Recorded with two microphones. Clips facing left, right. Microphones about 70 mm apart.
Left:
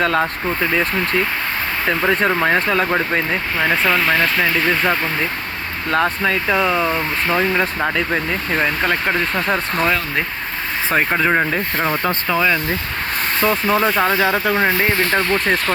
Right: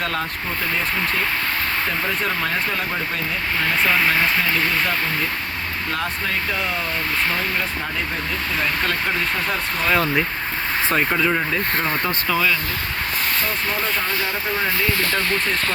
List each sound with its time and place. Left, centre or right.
0.0 s speech: left
2.2 s speech: left
2.5 s speech: left
3.8 s speech: centre
5.9 s speech: left
6.3 s speech: left
7.9 s speech: left
8.9 s speech: left
10.9 s speech: left
11.3 s speech: left
13.7 s speech: left